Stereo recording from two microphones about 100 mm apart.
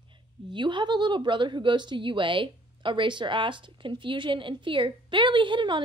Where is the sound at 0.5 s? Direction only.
50° right (ahead or behind).